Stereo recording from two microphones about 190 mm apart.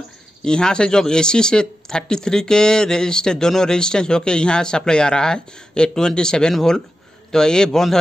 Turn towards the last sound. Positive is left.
turn(degrees=0)  # may be behind; listen again after turning